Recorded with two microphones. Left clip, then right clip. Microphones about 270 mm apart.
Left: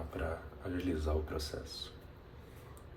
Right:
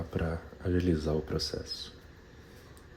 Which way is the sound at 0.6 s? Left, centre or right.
Right.